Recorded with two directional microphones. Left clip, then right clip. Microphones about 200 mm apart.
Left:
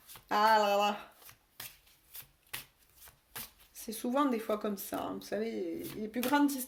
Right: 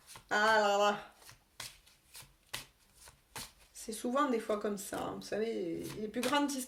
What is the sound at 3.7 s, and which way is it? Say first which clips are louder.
Speech: left 1 dB; 40° left (ahead or behind).